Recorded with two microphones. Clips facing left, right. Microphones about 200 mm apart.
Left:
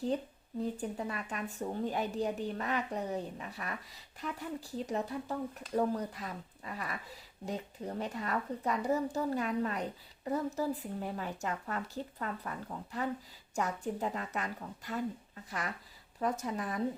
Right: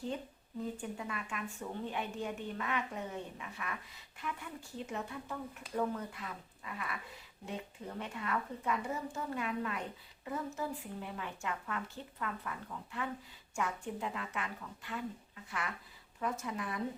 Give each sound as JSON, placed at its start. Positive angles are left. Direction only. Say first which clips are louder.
{"t": 0.8, "sound": "a woman's voice", "louder": "left 4 dB", "side_deg": 35}